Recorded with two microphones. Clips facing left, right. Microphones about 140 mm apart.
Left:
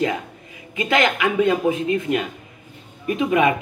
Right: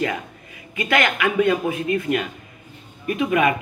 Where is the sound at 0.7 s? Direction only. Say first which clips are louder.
Left 2 dB; 25° left (ahead or behind).